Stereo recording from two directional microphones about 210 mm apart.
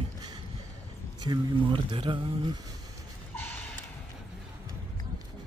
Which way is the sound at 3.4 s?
10° left (ahead or behind).